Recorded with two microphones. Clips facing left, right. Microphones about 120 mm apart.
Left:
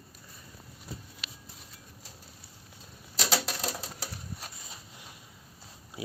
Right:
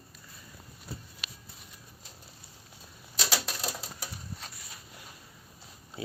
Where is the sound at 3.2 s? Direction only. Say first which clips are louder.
Left 3 dB; 20° left (ahead or behind).